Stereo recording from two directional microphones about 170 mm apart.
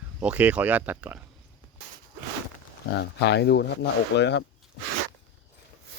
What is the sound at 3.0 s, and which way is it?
Speech, 80° left.